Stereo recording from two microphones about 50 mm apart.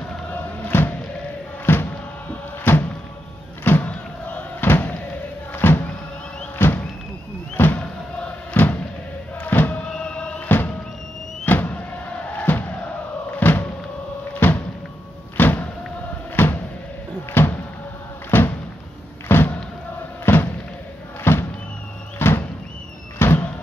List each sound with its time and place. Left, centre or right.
0.3 s music: left
3.8 s crowd: left
4.6 s slam: left
5.5 s music: left
6.6 s a sound: left
8.6 s music: left
9.8 s music: left
11.4 s vehicle: left
12.3 s music: left
15.3 s vehicle: left
16.4 s a sound: left
20.3 s thump: left
21.2 s music: left
22.2 s a sound: left